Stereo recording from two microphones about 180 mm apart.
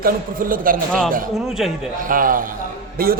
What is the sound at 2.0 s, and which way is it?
Speech, 50° right (ahead or behind).